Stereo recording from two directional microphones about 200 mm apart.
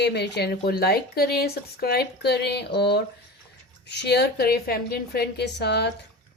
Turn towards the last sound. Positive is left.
turn(degrees=55)  # may be behind; listen again after turning